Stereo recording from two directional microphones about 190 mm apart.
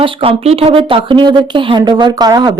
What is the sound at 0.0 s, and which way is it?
Speech, 30° right (ahead or behind).